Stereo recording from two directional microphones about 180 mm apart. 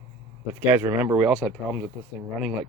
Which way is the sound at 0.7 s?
10° right (ahead or behind).